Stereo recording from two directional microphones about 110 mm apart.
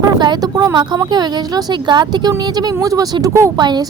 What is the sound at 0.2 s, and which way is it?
Speech, 40° right (ahead or behind).